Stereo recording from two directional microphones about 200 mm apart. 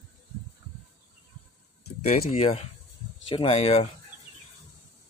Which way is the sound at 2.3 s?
30° left (ahead or behind).